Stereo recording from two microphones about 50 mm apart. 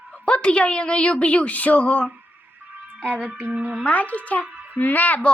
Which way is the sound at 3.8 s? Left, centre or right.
Left.